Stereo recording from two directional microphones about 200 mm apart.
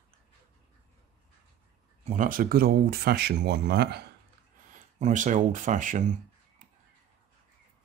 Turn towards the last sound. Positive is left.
turn(degrees=-40)  # may be behind; listen again after turning